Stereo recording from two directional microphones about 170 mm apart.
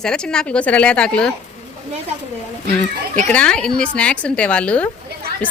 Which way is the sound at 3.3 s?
5° left (ahead or behind).